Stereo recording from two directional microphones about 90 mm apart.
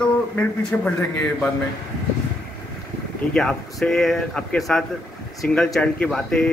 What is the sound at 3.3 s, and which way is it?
Speech, 5° left (ahead or behind).